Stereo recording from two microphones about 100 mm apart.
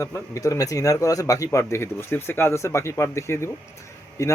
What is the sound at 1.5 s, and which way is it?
Speech, 25° left (ahead or behind).